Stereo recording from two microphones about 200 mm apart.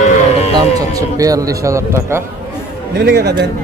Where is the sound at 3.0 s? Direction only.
55° right (ahead or behind).